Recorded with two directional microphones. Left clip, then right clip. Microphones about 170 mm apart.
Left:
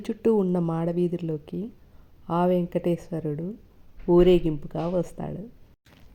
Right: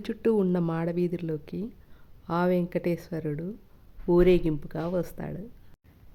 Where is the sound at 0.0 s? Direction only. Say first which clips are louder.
Left 2 dB; 5° right (ahead or behind).